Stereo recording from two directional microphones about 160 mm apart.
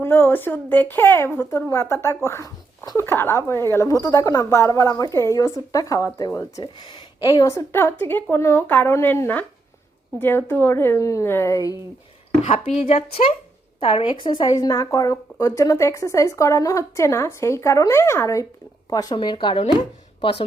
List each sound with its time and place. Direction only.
0.0 s a woman's voice: 15° left (ahead or behind)
12.4 s a woman's voice: 40° left (ahead or behind)